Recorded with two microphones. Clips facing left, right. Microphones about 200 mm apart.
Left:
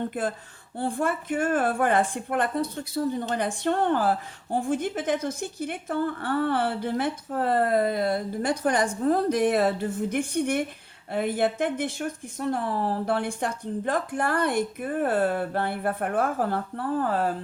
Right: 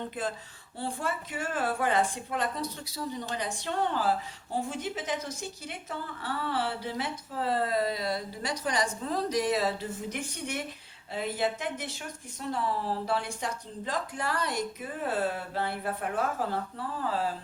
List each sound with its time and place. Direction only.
0.1 s a woman's voice: 50° left (ahead or behind)